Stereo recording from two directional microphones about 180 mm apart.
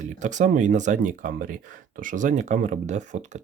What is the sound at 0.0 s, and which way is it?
Speech, 45° right (ahead or behind).